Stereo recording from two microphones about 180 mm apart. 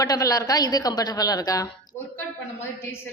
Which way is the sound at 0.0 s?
20° left (ahead or behind).